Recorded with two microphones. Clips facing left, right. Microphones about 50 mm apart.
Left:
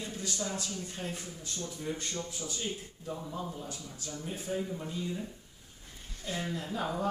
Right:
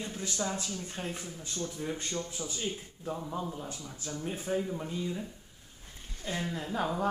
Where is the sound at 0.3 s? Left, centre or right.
Centre.